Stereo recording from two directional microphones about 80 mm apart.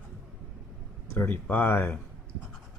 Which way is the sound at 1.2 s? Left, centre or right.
Left.